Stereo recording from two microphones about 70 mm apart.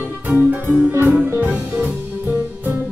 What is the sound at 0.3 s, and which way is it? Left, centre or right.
Music, right.